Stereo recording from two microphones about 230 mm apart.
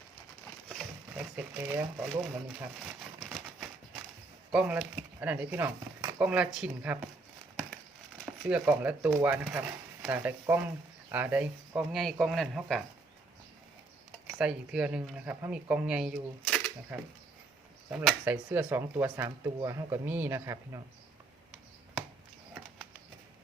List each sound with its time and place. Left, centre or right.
1.2 s speech: centre
4.5 s speech: centre
8.2 s speech: centre
14.3 s speech: centre
17.9 s speech: centre